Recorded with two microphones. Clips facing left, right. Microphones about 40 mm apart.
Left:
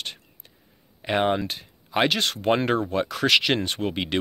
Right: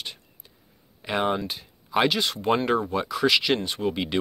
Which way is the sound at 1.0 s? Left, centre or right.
Left.